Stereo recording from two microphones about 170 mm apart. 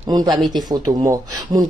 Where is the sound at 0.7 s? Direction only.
20° right (ahead or behind).